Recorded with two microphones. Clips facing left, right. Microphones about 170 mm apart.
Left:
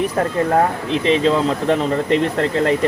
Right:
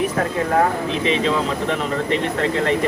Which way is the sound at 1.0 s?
35° left (ahead or behind).